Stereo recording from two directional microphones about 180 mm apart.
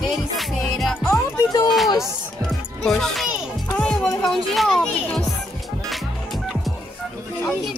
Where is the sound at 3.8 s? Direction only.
5° left (ahead or behind).